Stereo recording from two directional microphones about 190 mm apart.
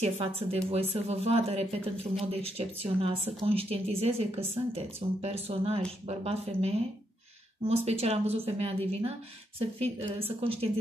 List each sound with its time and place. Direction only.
0.0 s a woman's voice: 30° right (ahead or behind)